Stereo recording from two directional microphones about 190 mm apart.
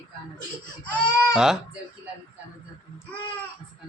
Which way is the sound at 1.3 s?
5° right (ahead or behind).